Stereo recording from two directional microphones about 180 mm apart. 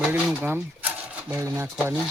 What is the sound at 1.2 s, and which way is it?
Speech, 15° right (ahead or behind).